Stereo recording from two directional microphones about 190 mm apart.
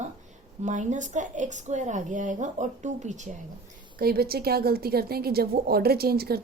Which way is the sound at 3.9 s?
55° right (ahead or behind).